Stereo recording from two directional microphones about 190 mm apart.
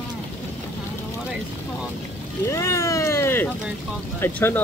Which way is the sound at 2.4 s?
15° left (ahead or behind).